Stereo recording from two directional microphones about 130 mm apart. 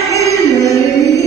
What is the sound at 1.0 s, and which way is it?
Chant, 25° left (ahead or behind).